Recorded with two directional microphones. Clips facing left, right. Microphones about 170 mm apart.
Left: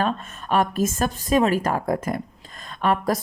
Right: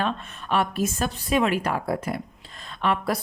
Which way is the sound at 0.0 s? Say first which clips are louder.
Left 3 dB; 45° left (ahead or behind).